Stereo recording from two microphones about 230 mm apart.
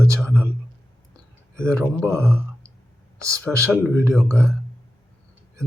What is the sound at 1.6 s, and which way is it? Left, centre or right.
Speech, centre.